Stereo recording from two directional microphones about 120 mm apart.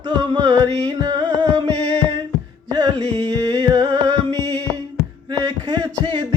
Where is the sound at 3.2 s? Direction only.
30° right (ahead or behind).